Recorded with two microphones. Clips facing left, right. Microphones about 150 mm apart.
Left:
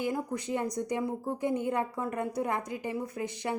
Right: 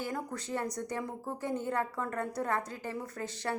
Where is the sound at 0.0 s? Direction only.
15° left (ahead or behind).